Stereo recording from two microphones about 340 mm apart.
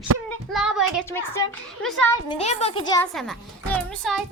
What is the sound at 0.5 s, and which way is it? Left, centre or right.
Speech, centre.